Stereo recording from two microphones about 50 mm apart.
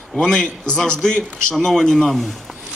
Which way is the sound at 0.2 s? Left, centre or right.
Centre.